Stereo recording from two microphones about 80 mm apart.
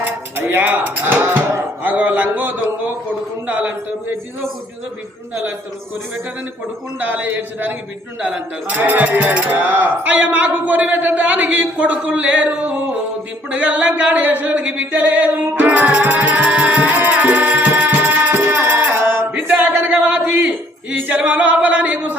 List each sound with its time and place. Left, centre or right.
0.0 s speech: right
7.0 s speech: right
13.5 s a sound: centre
19.3 s music: right
21.1 s singing: centre